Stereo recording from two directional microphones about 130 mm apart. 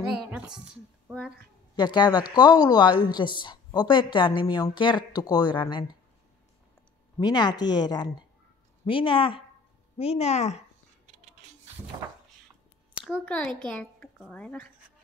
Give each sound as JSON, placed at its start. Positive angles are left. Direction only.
{"t": 0.1, "sound": "a sound", "side_deg": -10}
{"t": 1.8, "sound": "a woman's voice", "side_deg": 35}
{"t": 7.2, "sound": "a woman's voice", "side_deg": 35}
{"t": 13.2, "sound": "a child's voice", "side_deg": 10}